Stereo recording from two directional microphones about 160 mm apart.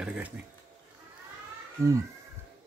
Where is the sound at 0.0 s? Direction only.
5° right (ahead or behind).